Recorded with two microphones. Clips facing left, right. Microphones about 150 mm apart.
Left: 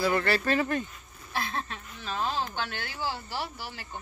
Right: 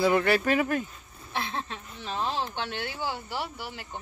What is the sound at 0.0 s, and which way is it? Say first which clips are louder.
Speech: right 3 dB; 15° right (ahead or behind).